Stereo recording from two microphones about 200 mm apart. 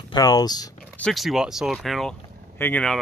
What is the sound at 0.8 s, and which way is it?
Speech, 5° left (ahead or behind).